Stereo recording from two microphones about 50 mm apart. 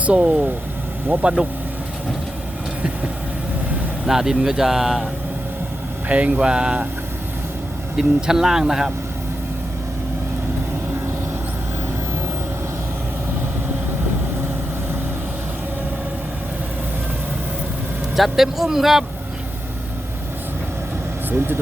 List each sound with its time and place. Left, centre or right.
0.0 s speech: right
4.0 s speech: centre
6.1 s speech: right
7.9 s speech: centre
18.2 s speech: centre
21.2 s speech: right